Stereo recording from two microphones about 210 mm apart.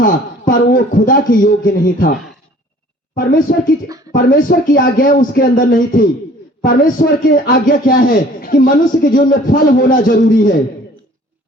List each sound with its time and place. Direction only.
0.0 s a man's voice: 40° left (ahead or behind)
3.2 s a man's voice: 40° left (ahead or behind)